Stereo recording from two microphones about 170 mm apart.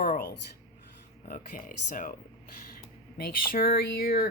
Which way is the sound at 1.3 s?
55° left (ahead or behind).